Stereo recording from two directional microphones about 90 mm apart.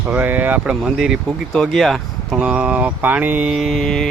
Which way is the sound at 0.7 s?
5° right (ahead or behind).